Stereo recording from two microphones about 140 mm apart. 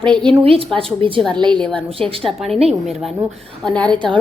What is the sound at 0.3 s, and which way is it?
A woman's voice, 40° right (ahead or behind).